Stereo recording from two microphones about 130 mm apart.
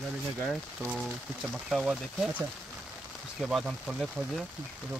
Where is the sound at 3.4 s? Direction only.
5° right (ahead or behind).